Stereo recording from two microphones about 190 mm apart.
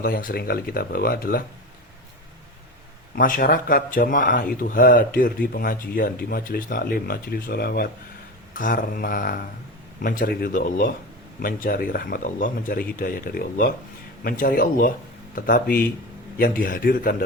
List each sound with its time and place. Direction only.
0.0 s speech: 45° left (ahead or behind)
3.2 s speech: 45° left (ahead or behind)